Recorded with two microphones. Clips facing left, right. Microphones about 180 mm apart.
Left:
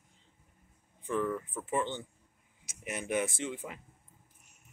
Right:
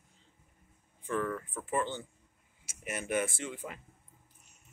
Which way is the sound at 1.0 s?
15° left (ahead or behind).